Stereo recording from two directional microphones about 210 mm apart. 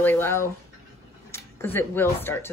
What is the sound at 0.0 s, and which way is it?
A woman's voice, 10° left (ahead or behind).